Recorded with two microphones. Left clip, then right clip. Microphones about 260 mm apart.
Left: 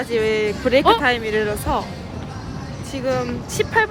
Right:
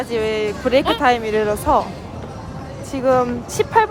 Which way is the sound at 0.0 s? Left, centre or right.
Centre.